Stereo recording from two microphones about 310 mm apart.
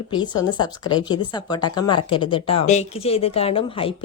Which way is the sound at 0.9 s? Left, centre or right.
Centre.